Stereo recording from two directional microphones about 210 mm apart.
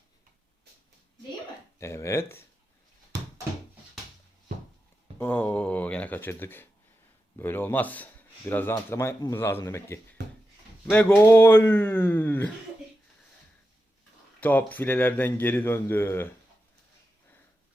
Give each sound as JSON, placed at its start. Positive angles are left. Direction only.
{"t": 1.8, "sound": "speech", "side_deg": 15}
{"t": 5.1, "sound": "a sound", "side_deg": 10}
{"t": 7.3, "sound": "speech", "side_deg": 10}
{"t": 14.4, "sound": "speech", "side_deg": 10}